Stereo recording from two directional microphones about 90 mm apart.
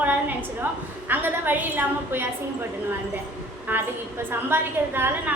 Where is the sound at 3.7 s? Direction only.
20° right (ahead or behind).